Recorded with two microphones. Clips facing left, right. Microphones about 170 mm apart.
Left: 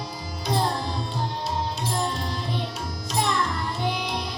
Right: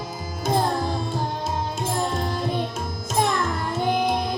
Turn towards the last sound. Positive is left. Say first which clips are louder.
# right 6 dB
turn(degrees=-50)  # may be behind; listen again after turning